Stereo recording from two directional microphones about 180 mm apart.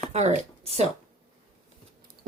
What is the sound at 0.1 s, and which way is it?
Speech, 40° right (ahead or behind).